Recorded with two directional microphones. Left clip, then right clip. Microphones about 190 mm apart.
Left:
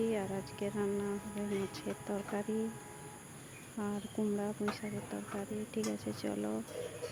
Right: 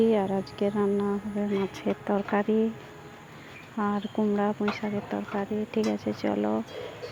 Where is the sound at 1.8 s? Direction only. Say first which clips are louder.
Right 12 dB; 10° right (ahead or behind).